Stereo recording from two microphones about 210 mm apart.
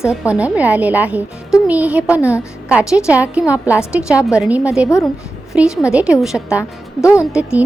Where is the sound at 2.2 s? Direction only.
10° left (ahead or behind).